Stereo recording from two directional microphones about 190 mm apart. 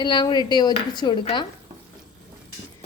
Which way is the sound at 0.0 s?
25° left (ahead or behind).